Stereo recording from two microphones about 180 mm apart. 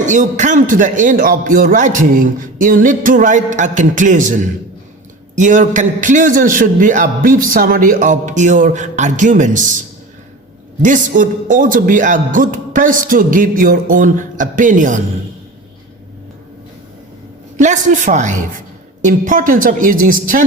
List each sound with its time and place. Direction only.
0.0 s a man's voice: 40° right (ahead or behind)
5.4 s a man's voice: 45° right (ahead or behind)
10.8 s a man's voice: 45° right (ahead or behind)
17.6 s a man's voice: 45° right (ahead or behind)